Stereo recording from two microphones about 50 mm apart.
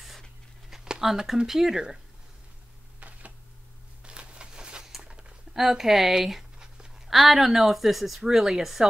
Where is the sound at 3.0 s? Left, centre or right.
Right.